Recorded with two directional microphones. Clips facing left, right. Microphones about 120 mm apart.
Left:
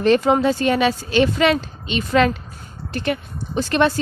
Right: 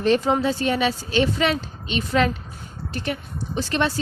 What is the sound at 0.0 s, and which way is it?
Speech, 80° left.